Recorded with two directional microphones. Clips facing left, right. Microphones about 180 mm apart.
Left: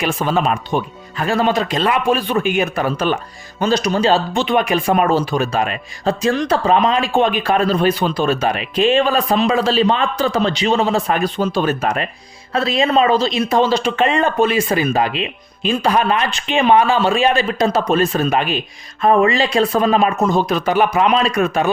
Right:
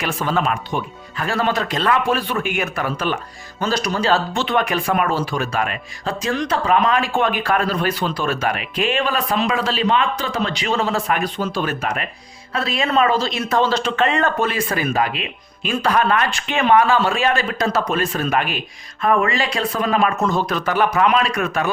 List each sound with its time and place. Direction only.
0.0 s speech: 15° left (ahead or behind)